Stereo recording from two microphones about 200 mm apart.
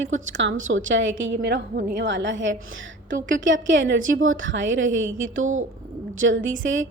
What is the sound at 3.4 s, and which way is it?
A woman's voice, 70° right (ahead or behind).